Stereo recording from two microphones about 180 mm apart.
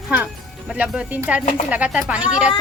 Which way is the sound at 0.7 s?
5° right (ahead or behind).